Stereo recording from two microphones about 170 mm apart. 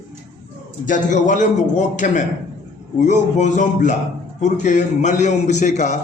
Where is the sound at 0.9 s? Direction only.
50° left (ahead or behind).